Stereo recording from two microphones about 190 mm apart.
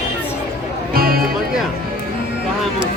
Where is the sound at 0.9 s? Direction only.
50° right (ahead or behind).